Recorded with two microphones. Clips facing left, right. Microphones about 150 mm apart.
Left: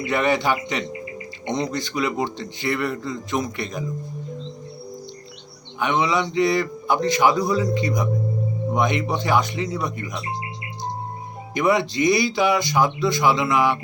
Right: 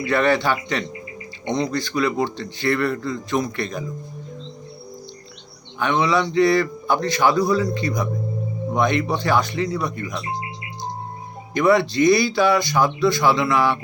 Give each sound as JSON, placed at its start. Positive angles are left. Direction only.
{"t": 0.0, "sound": "speech", "side_deg": 15}
{"t": 5.8, "sound": "a man's voice", "side_deg": 20}
{"t": 11.5, "sound": "speech", "side_deg": 20}